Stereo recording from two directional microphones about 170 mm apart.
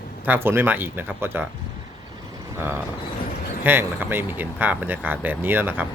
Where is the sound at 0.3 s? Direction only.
15° right (ahead or behind).